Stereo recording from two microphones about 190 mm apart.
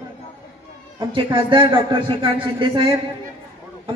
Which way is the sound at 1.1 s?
25° right (ahead or behind).